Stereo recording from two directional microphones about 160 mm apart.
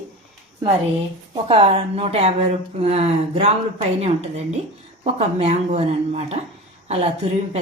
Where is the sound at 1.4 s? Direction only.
35° right (ahead or behind).